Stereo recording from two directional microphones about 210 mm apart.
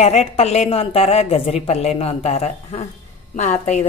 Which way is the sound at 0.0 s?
30° left (ahead or behind).